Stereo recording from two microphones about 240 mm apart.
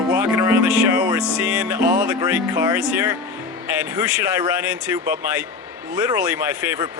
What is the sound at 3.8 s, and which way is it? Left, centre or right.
Speech, centre.